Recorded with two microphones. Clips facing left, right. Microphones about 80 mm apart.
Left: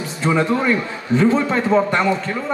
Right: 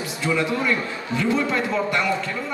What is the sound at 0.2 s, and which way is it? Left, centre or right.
A man's voice, left.